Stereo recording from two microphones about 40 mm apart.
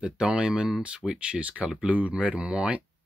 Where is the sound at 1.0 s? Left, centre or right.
Left.